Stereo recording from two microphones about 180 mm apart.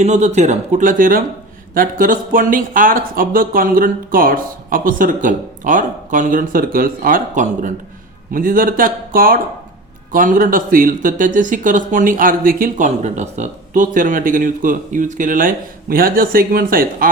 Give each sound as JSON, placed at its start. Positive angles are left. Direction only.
{"t": 0.0, "sound": "speech", "side_deg": -40}